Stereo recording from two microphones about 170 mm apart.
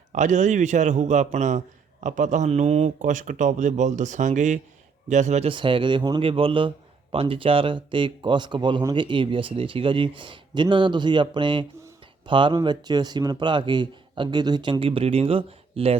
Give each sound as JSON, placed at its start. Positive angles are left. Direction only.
{"t": 0.1, "sound": "speech", "side_deg": -45}